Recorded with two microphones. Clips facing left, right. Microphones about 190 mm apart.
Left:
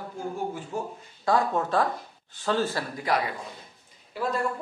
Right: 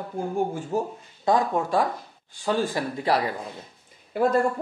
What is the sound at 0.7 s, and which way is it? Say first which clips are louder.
Speech: right 8 dB; 40° right (ahead or behind).